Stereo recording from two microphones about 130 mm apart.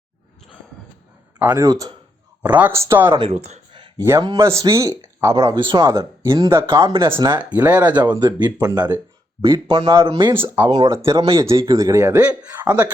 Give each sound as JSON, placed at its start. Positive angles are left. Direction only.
{"t": 1.4, "sound": "speech", "side_deg": -15}
{"t": 1.6, "sound": "speech", "side_deg": -30}
{"t": 2.4, "sound": "speech", "side_deg": -10}
{"t": 3.1, "sound": "speech", "side_deg": -40}
{"t": 3.3, "sound": "speech", "side_deg": -55}
{"t": 3.7, "sound": "a sound", "side_deg": -40}
{"t": 4.4, "sound": "speech", "side_deg": -20}
{"t": 5.8, "sound": "speech", "side_deg": -25}
{"t": 6.8, "sound": "speech", "side_deg": -40}
{"t": 7.5, "sound": "speech", "side_deg": -10}
{"t": 8.0, "sound": "speech", "side_deg": -35}
{"t": 10.3, "sound": "speech", "side_deg": -15}